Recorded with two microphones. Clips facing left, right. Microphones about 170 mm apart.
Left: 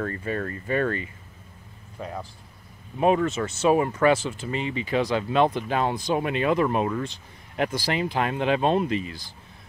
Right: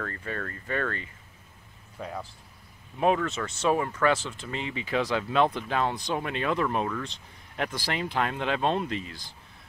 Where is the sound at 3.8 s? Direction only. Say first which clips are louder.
Left 5 dB; 15° left (ahead or behind).